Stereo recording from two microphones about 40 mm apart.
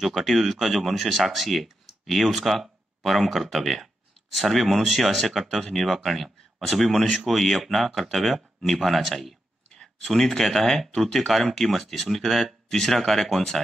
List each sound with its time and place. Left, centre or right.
0.1 s speech: centre